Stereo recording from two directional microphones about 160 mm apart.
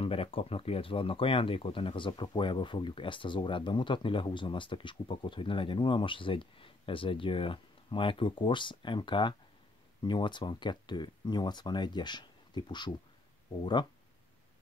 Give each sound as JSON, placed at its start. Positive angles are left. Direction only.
{"t": 0.0, "sound": "speech", "side_deg": 35}